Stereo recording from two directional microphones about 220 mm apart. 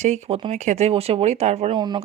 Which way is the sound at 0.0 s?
30° right (ahead or behind).